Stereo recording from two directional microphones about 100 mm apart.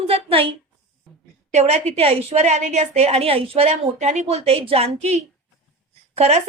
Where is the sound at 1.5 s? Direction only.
90° right.